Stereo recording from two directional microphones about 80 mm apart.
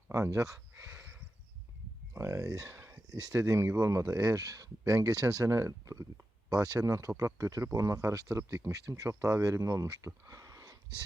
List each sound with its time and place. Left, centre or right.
0.1 s speech: right
2.1 s speech: right
2.7 s a sound: right
3.4 s speech: right
6.5 s speech: right
10.2 s a sound: right